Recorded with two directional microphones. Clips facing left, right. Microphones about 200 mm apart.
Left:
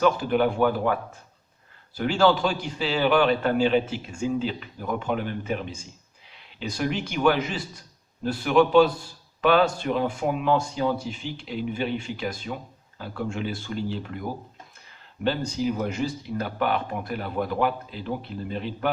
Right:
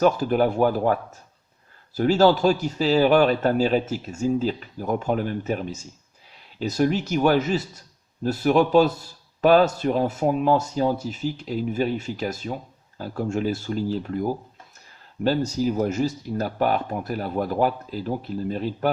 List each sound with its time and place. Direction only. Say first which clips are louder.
0.0 s speech: right 2 dB; 40° right (ahead or behind)
2.0 s speech: right 3 dB; 40° right (ahead or behind)